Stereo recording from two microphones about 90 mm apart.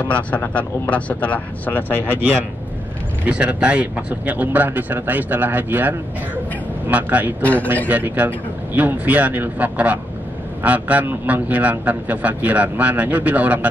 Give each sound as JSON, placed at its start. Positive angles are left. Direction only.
{"t": 0.0, "sound": "speech", "side_deg": 20}
{"t": 3.3, "sound": "a man's voice", "side_deg": -15}